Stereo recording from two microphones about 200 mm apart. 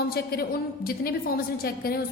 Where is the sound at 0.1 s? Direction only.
50° left (ahead or behind).